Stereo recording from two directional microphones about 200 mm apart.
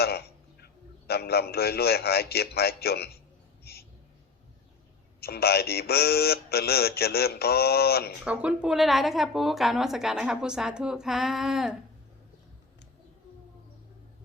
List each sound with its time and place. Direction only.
0.0 s a man's voice: 50° left (ahead or behind)
3.6 s a sound: 50° left (ahead or behind)
5.2 s speech: 50° left (ahead or behind)
8.2 s speech: 5° right (ahead or behind)